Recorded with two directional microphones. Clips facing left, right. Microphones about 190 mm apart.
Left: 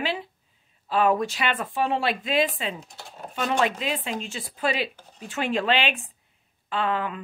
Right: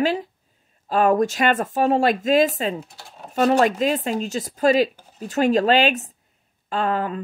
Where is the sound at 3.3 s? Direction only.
40° right (ahead or behind).